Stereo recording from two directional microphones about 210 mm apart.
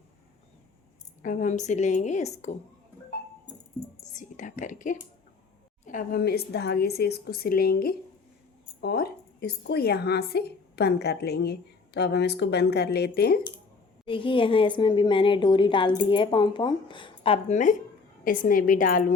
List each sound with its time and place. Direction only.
1.2 s a woman's voice: 40° left (ahead or behind)
4.1 s a woman's voice: 35° left (ahead or behind)
14.0 s a woman's voice: 25° left (ahead or behind); by 19.1 s 40° left (ahead or behind)